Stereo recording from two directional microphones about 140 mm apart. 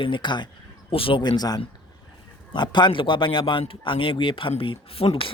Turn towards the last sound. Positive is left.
turn(degrees=40)  # may be behind; listen again after turning